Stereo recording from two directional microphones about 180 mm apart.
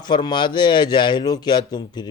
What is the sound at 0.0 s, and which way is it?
Speech, 25° left (ahead or behind).